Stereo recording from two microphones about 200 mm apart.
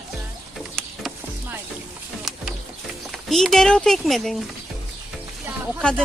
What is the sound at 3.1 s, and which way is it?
Speech, centre (ahead or behind).